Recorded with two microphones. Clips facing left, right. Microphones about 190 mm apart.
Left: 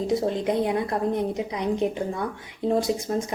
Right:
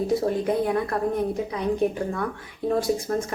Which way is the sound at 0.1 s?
20° left (ahead or behind).